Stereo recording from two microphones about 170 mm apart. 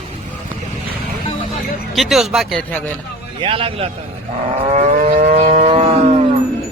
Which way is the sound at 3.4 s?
30° right (ahead or behind).